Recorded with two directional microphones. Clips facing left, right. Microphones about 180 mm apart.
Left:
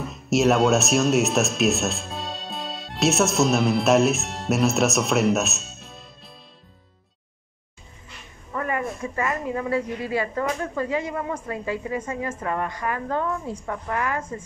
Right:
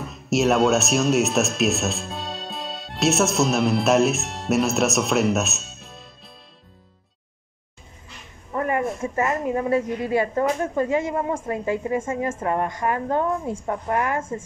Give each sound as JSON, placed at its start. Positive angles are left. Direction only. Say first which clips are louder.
{"t": 0.0, "sound": "speech", "louder": "left 1 dB", "side_deg": 0}
{"t": 8.5, "sound": "a woman's voice", "louder": "right 4 dB", "side_deg": -25}